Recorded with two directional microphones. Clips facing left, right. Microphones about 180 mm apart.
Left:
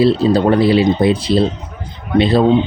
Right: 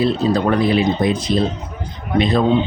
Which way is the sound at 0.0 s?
30° left (ahead or behind).